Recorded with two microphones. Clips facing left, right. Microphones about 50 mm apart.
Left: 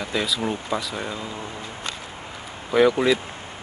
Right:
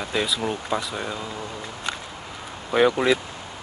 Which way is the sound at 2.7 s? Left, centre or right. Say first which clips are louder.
Left 1 dB; right.